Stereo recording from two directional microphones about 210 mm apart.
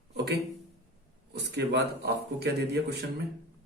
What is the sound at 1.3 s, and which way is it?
A man's voice, 50° right (ahead or behind).